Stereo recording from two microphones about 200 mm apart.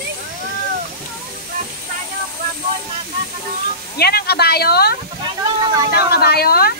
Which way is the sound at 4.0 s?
50° left (ahead or behind).